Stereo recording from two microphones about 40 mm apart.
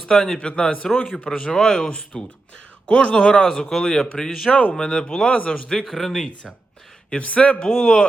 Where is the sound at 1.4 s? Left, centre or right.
Centre.